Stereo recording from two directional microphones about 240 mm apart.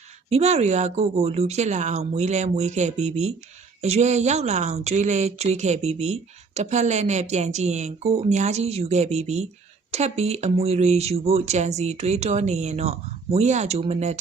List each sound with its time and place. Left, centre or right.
0.3 s speech: right